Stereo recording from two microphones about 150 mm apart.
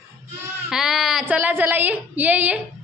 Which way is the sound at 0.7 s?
5° right (ahead or behind).